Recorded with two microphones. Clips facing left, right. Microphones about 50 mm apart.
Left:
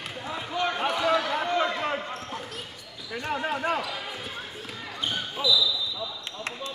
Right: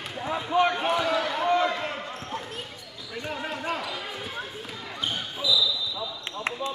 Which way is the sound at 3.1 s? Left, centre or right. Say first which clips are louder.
Left 3 dB; left.